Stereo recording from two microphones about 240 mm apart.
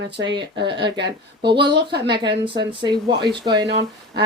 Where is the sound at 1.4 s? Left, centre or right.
Centre.